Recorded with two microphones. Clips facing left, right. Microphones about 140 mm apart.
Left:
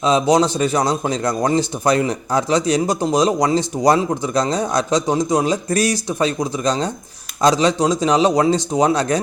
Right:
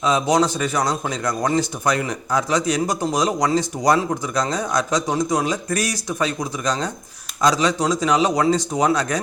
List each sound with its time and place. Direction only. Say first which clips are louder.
0.0 s a man's voice: left 3 dB; 25° left (ahead or behind)